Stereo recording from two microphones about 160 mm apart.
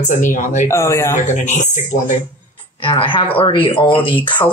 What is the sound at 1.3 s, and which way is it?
Speech, 50° left (ahead or behind).